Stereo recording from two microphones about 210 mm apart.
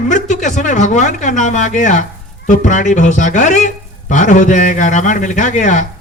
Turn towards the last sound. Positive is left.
turn(degrees=35)  # may be behind; listen again after turning